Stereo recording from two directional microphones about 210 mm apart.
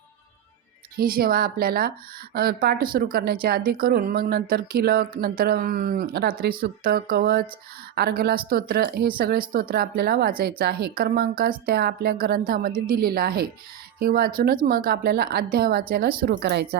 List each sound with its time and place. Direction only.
0.9 s speech: 45° right (ahead or behind)